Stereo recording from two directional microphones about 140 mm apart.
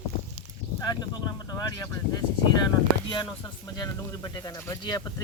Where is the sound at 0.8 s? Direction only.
30° left (ahead or behind).